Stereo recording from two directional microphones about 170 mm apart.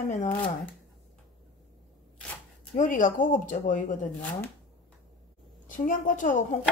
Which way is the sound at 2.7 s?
50° left (ahead or behind).